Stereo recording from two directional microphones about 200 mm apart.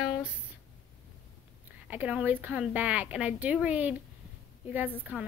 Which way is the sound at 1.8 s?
5° right (ahead or behind).